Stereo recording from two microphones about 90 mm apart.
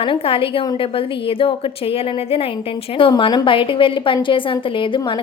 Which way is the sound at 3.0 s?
70° left (ahead or behind).